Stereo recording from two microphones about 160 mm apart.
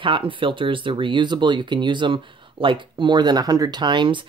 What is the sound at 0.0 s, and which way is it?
Speech, 30° right (ahead or behind).